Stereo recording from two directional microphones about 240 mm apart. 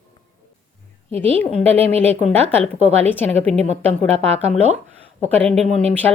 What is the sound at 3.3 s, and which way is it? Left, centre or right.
Speech, right.